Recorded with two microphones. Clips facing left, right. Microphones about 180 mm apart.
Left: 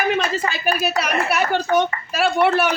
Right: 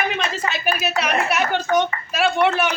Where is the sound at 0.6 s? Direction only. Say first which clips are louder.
Left 2 dB; 35° left (ahead or behind).